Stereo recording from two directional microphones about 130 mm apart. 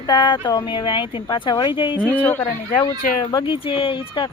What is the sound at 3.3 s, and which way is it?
Speech, 30° left (ahead or behind).